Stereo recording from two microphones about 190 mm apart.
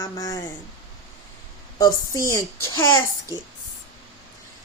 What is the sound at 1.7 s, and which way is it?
A woman's voice, 15° left (ahead or behind).